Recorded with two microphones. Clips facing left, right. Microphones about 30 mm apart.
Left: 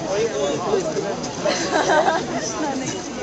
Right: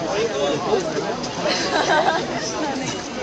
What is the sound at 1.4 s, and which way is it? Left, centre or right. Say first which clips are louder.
Speech: left 1 dB; right.